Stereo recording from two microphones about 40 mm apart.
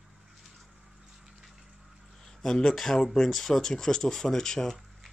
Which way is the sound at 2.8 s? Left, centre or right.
Centre.